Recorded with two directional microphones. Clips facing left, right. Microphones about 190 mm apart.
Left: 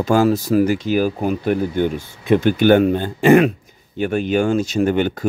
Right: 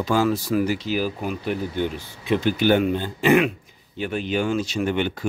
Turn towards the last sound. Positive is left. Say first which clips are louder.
# left 6 dB
turn(degrees=45)  # may be behind; listen again after turning